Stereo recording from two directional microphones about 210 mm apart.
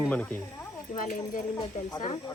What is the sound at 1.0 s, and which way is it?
Speech, 40° left (ahead or behind).